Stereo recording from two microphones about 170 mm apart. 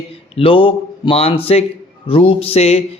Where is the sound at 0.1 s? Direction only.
35° left (ahead or behind).